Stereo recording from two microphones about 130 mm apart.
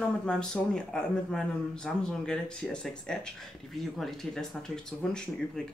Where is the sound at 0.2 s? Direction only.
5° left (ahead or behind).